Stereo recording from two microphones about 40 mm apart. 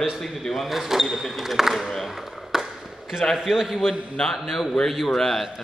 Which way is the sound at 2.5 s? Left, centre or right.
Centre.